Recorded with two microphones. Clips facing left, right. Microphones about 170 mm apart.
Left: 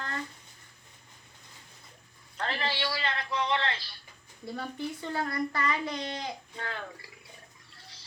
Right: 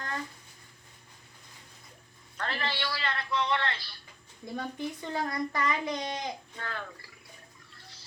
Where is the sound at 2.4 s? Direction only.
25° left (ahead or behind).